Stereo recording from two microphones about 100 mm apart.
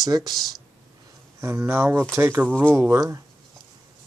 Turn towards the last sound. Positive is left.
turn(degrees=-30)  # may be behind; listen again after turning